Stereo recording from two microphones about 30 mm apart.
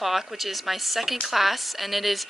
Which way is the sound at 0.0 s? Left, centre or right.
Centre.